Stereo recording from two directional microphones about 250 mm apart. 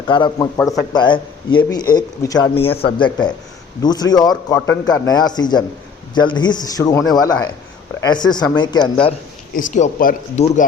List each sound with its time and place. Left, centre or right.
0.1 s a man's voice: centre
9.6 s speech: left